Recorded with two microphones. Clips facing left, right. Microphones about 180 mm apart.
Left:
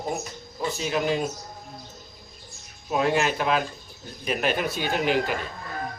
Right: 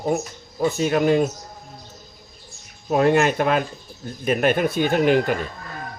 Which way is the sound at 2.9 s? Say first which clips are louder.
Right 6 dB; 50° right (ahead or behind).